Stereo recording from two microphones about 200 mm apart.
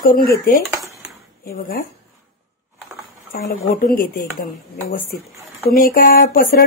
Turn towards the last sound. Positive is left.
turn(degrees=45)  # may be behind; listen again after turning